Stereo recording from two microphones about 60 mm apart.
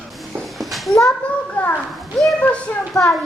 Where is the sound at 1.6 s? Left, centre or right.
Left.